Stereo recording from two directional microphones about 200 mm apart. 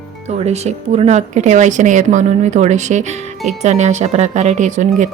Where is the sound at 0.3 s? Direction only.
35° right (ahead or behind).